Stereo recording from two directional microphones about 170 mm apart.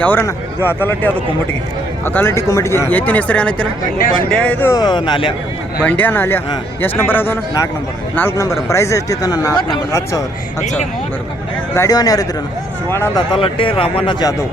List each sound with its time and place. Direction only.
0.0 s speech: 10° left (ahead or behind)
4.7 s speech: 25° left (ahead or behind)
6.0 s speech: 10° left (ahead or behind)
11.7 s speech: 20° left (ahead or behind)
13.3 s speech: 30° left (ahead or behind)